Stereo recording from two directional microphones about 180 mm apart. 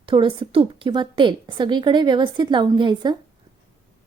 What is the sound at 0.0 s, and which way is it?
A woman's voice, 25° right (ahead or behind).